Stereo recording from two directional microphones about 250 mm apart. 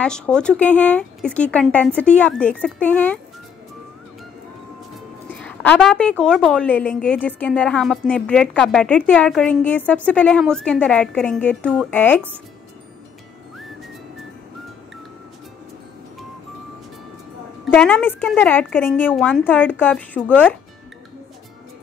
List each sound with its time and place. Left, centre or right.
0.0 s a woman's voice: centre
4.9 s a woman's voice: centre
17.6 s a woman's voice: centre